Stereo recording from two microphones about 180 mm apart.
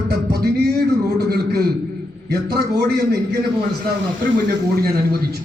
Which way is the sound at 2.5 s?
65° right (ahead or behind).